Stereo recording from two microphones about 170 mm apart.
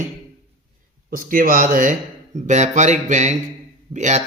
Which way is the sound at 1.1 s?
55° right (ahead or behind).